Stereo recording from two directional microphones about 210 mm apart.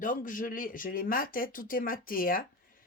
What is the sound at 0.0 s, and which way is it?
Speech, 40° left (ahead or behind).